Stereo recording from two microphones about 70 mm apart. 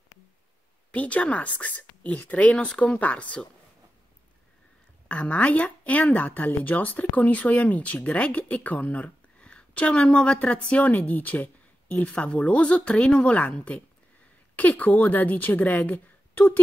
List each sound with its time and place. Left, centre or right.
0.9 s speech: centre
5.0 s speech: centre